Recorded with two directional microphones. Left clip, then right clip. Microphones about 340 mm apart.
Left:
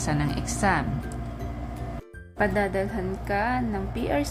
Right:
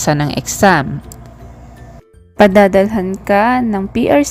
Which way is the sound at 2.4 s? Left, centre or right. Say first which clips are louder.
Right 17 dB; right.